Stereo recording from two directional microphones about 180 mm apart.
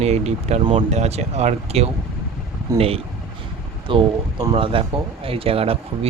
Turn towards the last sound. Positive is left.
turn(degrees=-30)  # may be behind; listen again after turning